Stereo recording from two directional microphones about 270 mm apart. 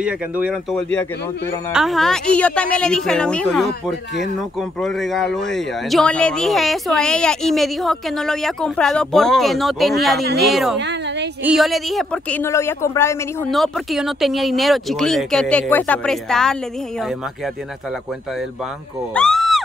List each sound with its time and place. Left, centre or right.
0.0 s speech: centre
10.8 s a sound: right
11.4 s speech: centre
19.1 s speech: centre